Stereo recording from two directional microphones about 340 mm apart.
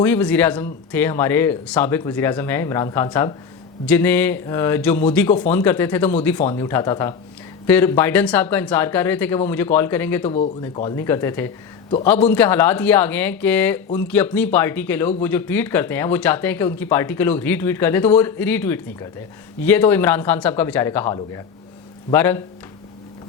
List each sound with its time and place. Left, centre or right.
0.0 s speech: centre